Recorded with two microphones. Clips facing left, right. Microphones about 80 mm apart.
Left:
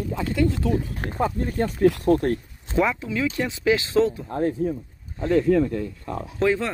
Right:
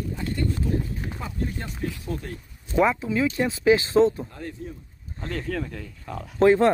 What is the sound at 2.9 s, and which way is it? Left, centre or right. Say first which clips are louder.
Speech: right 2 dB; right.